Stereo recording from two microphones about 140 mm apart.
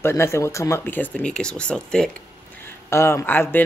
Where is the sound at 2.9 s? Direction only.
20° left (ahead or behind).